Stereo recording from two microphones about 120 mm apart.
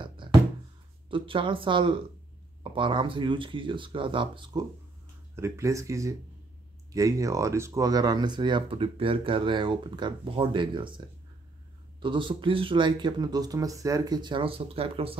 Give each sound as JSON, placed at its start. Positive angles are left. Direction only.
{"t": 0.0, "sound": "a sound", "side_deg": -40}
{"t": 1.1, "sound": "speech", "side_deg": -45}
{"t": 5.3, "sound": "speech", "side_deg": -25}
{"t": 12.0, "sound": "speech", "side_deg": -45}